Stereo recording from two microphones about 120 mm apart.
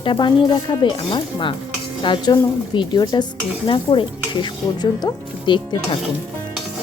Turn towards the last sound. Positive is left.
turn(degrees=40)  # may be behind; listen again after turning